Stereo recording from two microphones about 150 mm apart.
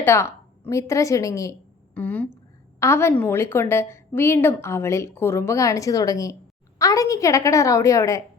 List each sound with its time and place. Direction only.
0.0 s a woman's voice: 15° left (ahead or behind)
2.0 s a woman's voice: 10° left (ahead or behind)